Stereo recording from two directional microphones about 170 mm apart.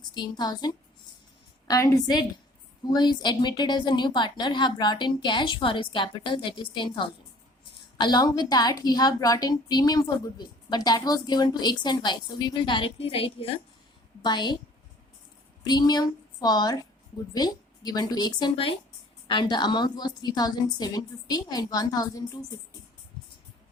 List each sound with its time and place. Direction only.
0.0 s a woman's voice: 25° left (ahead or behind)
15.6 s a woman's voice: 25° left (ahead or behind)